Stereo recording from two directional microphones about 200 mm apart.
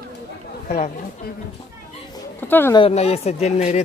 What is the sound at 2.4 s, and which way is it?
Speech, 10° left (ahead or behind).